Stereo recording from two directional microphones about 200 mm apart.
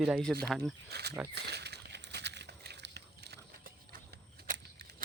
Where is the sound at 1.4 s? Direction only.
55° right (ahead or behind).